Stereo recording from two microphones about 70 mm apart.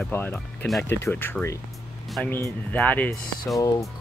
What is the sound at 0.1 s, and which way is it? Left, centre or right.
Speech, left.